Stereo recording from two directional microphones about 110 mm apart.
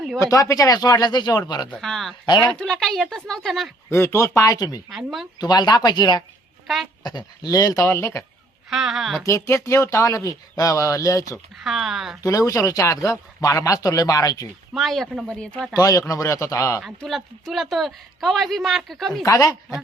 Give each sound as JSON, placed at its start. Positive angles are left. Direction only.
{"t": 0.2, "sound": "speech", "side_deg": 30}
{"t": 1.8, "sound": "speech", "side_deg": 0}
{"t": 3.8, "sound": "a man's voice", "side_deg": 25}
{"t": 4.9, "sound": "speech", "side_deg": 0}
{"t": 5.4, "sound": "speech", "side_deg": 40}
{"t": 7.9, "sound": "a man's voice", "side_deg": 25}
{"t": 8.7, "sound": "speech", "side_deg": -5}
{"t": 9.2, "sound": "a man's voice", "side_deg": 30}
{"t": 11.6, "sound": "speech", "side_deg": 0}
{"t": 12.2, "sound": "speech", "side_deg": 30}
{"t": 14.7, "sound": "speech", "side_deg": 0}
{"t": 15.7, "sound": "a man's voice", "side_deg": 30}
{"t": 16.8, "sound": "speech", "side_deg": 0}
{"t": 19.2, "sound": "speech", "side_deg": 35}